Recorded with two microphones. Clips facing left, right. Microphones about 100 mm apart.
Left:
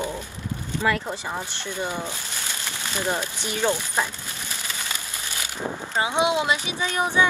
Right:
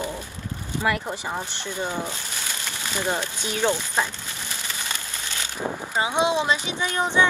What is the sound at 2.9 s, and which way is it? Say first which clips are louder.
Speech: even; 15° right (ahead or behind).